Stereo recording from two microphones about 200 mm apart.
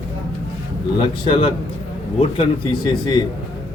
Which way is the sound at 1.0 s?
25° left (ahead or behind).